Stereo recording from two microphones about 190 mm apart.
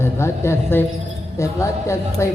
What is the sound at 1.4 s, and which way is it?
Speech, 15° left (ahead or behind).